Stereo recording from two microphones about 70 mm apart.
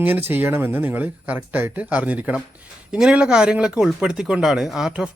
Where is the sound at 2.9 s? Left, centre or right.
Centre.